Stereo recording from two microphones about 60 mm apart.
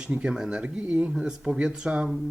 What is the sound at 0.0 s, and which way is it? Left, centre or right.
Speech, centre.